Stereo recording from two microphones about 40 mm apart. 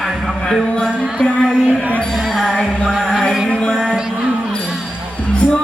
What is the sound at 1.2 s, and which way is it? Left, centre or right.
Music, centre.